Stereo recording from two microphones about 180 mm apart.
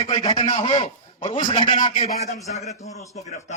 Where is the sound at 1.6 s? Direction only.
30° left (ahead or behind).